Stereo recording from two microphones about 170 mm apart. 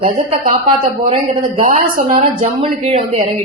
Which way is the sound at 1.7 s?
50° right (ahead or behind).